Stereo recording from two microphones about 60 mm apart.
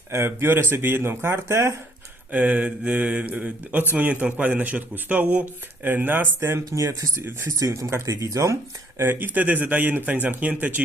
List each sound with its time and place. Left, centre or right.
0.1 s speech: right
2.3 s speech: right
5.9 s speech: right
6.7 s speech: right
9.0 s speech: right